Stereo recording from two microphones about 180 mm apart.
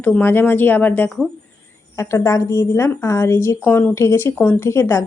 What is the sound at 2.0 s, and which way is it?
A woman's voice, 15° left (ahead or behind).